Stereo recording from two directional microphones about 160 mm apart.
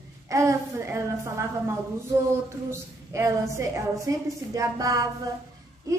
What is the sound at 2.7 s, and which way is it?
A woman's voice, 15° right (ahead or behind).